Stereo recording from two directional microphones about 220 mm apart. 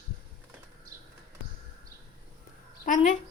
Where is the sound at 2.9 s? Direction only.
35° left (ahead or behind).